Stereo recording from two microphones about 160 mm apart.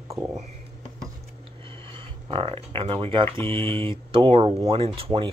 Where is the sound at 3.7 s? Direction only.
35° right (ahead or behind).